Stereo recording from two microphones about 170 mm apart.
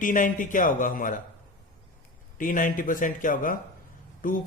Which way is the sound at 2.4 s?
50° left (ahead or behind).